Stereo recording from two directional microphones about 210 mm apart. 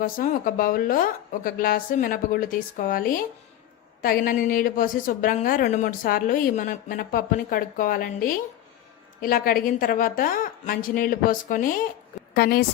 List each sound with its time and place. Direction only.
0.0 s a woman's voice: 40° left (ahead or behind)